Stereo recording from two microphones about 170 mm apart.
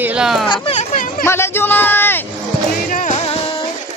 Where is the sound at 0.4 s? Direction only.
30° left (ahead or behind).